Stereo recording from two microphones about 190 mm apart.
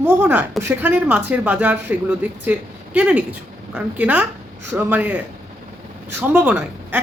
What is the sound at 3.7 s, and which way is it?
A woman's voice, 10° right (ahead or behind).